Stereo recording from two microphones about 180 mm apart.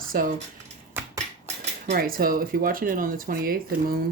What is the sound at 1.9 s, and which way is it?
Speech, 55° right (ahead or behind).